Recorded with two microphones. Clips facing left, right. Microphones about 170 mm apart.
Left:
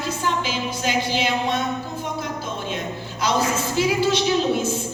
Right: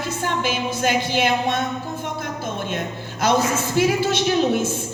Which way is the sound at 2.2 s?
50° right (ahead or behind).